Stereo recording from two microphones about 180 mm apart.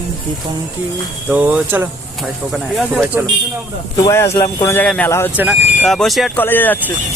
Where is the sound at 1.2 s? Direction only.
10° right (ahead or behind).